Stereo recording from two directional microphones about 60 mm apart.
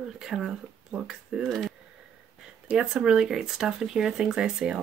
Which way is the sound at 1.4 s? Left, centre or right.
Centre.